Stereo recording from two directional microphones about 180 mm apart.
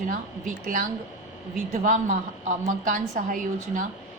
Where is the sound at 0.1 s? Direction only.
50° right (ahead or behind).